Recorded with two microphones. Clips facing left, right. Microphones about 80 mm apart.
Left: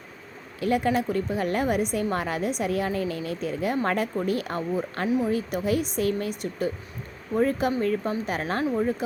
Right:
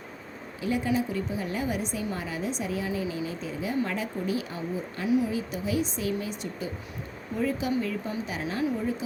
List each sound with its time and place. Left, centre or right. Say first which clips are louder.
0.6 s a woman's voice: left 4 dB; left
5.0 s speech: right 1 dB; left
5.3 s a woman's voice: left 5 dB; left